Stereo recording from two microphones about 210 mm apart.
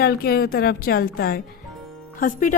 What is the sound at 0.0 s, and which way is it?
A woman's voice, 45° left (ahead or behind).